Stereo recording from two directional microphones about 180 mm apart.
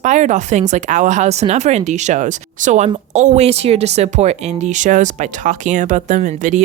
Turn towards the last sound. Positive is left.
turn(degrees=-45)  # may be behind; listen again after turning